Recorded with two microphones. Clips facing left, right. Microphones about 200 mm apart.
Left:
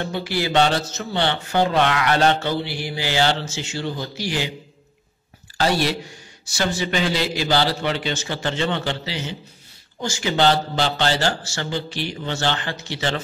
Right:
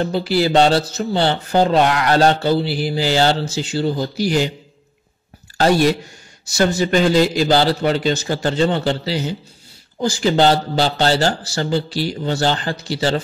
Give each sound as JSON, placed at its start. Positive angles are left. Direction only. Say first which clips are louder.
{"t": 0.0, "sound": "a man's voice", "louder": "right 7 dB", "side_deg": -35}
{"t": 5.6, "sound": "a man's voice", "louder": "right 6 dB", "side_deg": -45}